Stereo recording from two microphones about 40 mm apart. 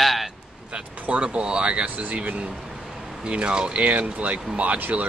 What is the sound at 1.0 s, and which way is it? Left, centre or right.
Speech, right.